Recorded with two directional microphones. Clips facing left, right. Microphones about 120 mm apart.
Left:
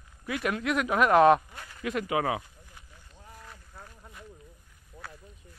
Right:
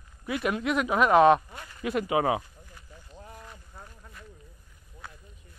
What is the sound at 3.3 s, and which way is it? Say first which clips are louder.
Boat: right 2 dB; 10° right (ahead or behind).